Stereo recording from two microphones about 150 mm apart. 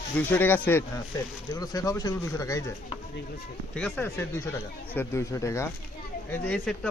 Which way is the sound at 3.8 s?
10° left (ahead or behind).